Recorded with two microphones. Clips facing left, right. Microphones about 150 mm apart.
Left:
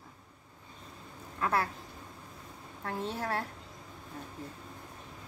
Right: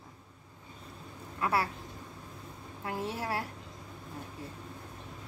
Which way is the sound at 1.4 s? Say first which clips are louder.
Even; 10° right (ahead or behind).